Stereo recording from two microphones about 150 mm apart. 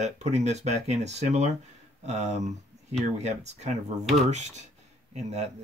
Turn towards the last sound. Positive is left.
turn(degrees=-45)  # may be behind; listen again after turning